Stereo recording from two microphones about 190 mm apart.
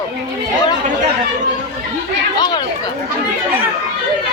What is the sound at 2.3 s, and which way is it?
Chatter, 20° left (ahead or behind).